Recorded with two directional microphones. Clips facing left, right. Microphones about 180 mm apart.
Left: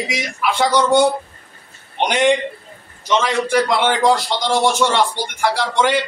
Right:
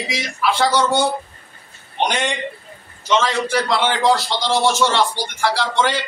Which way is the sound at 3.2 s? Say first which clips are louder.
Left 3 dB; 15° left (ahead or behind).